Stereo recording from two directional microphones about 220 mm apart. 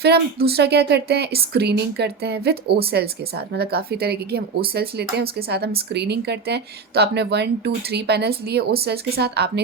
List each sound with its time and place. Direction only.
0.0 s a woman's voice: 45° right (ahead or behind)